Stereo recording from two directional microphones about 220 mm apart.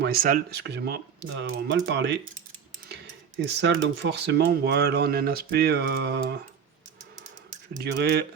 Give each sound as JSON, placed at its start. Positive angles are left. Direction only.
{"t": 0.0, "sound": "speech", "side_deg": -40}
{"t": 3.4, "sound": "speech", "side_deg": -50}
{"t": 7.8, "sound": "speech", "side_deg": -50}